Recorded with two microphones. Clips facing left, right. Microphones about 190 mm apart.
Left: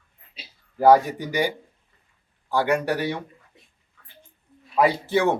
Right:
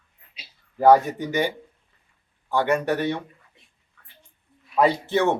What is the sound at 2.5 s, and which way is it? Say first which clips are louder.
Speech: even; 10° left (ahead or behind).